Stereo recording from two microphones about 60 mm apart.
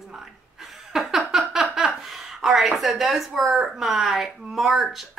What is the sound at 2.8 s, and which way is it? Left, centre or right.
Speech, centre.